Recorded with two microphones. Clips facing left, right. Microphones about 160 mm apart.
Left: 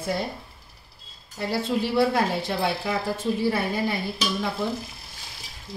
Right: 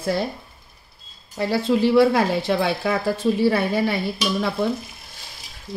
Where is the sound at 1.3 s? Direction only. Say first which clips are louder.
Right 6 dB; 90° right.